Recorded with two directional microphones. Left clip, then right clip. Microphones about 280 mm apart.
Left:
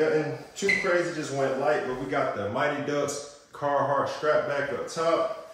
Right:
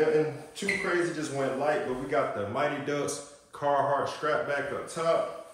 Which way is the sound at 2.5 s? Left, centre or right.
Centre.